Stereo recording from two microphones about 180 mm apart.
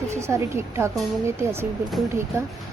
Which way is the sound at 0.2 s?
15° right (ahead or behind).